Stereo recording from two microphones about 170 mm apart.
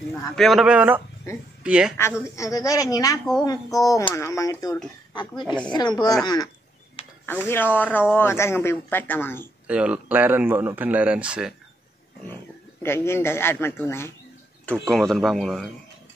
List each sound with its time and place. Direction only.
0.4 s a man's voice: centre (ahead or behind)
2.2 s a woman's voice: 20° left (ahead or behind)
5.4 s a man's voice: 5° left (ahead or behind)
5.7 s a woman's voice: 25° left (ahead or behind)
9.7 s speech: 5° right (ahead or behind)
12.8 s speech: 15° left (ahead or behind)
14.7 s a man's voice: 5° left (ahead or behind)